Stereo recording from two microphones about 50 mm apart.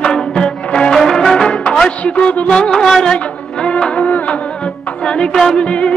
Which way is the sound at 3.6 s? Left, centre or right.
Left.